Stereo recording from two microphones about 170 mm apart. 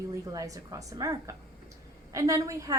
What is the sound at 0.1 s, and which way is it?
A woman's voice, 20° right (ahead or behind).